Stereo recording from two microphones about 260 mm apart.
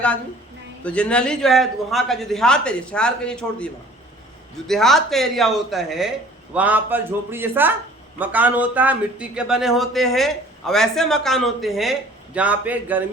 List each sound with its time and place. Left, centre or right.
0.9 s a man's voice: centre